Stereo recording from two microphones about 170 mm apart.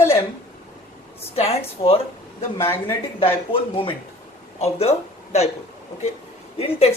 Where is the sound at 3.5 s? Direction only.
30° left (ahead or behind).